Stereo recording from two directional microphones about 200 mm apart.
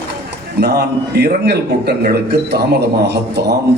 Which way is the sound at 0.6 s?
55° right (ahead or behind).